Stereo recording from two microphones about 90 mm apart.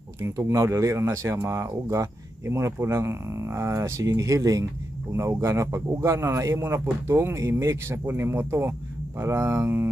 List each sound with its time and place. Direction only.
0.2 s speech: 35° right (ahead or behind)